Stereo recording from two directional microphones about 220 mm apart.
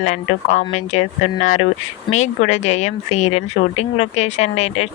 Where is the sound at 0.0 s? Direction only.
30° left (ahead or behind).